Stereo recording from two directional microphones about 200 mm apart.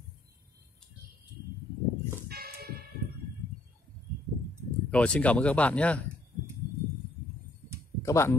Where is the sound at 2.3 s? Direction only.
50° right (ahead or behind).